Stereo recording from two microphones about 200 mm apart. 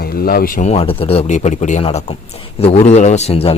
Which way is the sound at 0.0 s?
50° left (ahead or behind).